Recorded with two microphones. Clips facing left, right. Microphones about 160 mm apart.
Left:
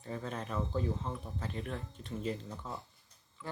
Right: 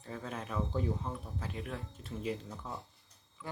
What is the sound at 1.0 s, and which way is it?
Speech, centre (ahead or behind).